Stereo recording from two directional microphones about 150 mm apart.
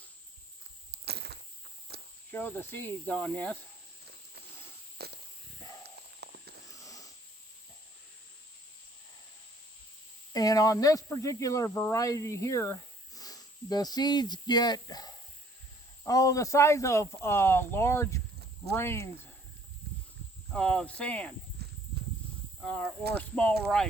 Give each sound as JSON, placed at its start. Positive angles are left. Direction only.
{"t": 0.9, "sound": "a sound", "side_deg": -90}
{"t": 1.9, "sound": "cricket", "side_deg": -90}
{"t": 2.3, "sound": "cricket", "side_deg": 10}
{"t": 4.9, "sound": "walk", "side_deg": -90}
{"t": 6.8, "sound": "snoring", "side_deg": 20}
{"t": 10.3, "sound": "speech", "side_deg": 25}
{"t": 18.7, "sound": "cricket", "side_deg": 15}
{"t": 20.5, "sound": "cricket", "side_deg": 5}
{"t": 21.6, "sound": "clip-clop", "side_deg": -90}
{"t": 22.6, "sound": "speech", "side_deg": 10}
{"t": 23.1, "sound": "cricket", "side_deg": 5}
{"t": 23.6, "sound": "speech", "side_deg": 5}